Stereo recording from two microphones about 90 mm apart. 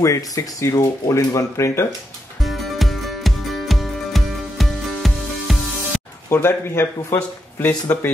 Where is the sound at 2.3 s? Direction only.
Centre (ahead or behind).